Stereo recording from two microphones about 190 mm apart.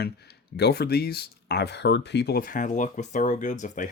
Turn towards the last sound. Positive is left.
turn(degrees=40)  # may be behind; listen again after turning